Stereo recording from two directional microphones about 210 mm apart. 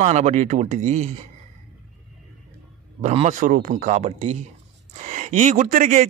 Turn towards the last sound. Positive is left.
turn(degrees=-40)  # may be behind; listen again after turning